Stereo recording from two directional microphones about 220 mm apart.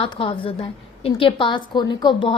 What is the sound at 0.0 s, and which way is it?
A woman's voice, 25° left (ahead or behind).